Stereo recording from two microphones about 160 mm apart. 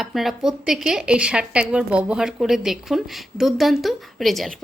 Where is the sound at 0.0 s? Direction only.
Centre (ahead or behind).